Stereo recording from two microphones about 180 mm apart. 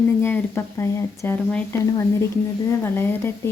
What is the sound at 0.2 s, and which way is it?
A woman's voice, 15° left (ahead or behind).